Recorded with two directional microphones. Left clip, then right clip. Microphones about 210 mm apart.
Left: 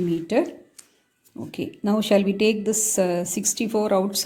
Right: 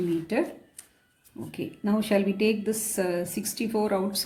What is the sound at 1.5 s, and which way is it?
A woman's voice, 35° left (ahead or behind).